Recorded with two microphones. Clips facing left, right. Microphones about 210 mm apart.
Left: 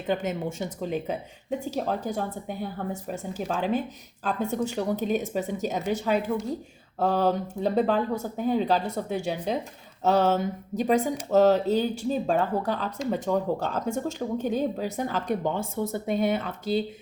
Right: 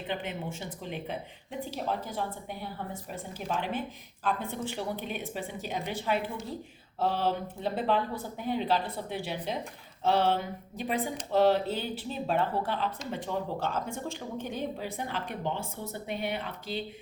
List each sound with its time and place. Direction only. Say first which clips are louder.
0.1 s a woman's voice: left 8 dB; 45° left (ahead or behind)